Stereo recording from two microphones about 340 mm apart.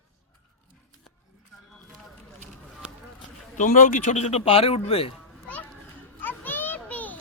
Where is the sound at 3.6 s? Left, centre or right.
Left.